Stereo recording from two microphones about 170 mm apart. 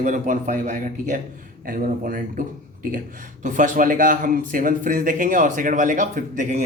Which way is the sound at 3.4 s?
50° right (ahead or behind).